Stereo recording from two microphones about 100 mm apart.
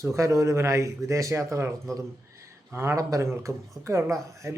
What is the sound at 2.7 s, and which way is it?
Speech, 25° right (ahead or behind).